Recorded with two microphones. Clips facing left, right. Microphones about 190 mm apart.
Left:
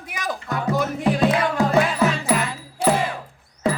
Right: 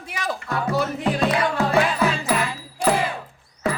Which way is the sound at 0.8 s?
10° left (ahead or behind).